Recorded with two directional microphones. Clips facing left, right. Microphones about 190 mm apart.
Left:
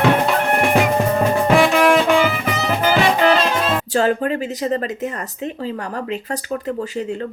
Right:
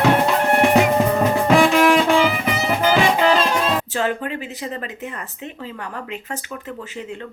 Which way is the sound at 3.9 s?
40° left (ahead or behind).